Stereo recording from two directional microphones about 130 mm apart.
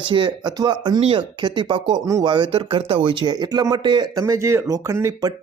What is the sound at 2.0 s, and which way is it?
Speech, 25° right (ahead or behind).